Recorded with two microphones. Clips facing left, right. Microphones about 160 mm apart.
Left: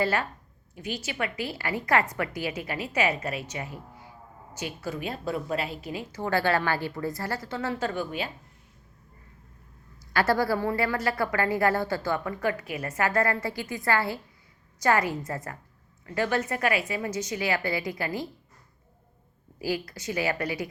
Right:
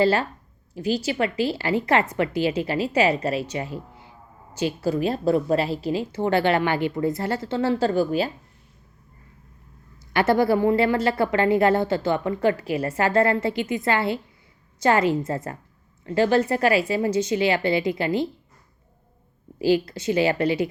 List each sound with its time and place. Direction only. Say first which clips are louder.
0.0 s a woman's voice: right 7 dB; 30° right (ahead or behind)
10.1 s a woman's voice: right 5 dB; 20° right (ahead or behind)
19.5 s a woman's voice: right 10 dB; 25° right (ahead or behind)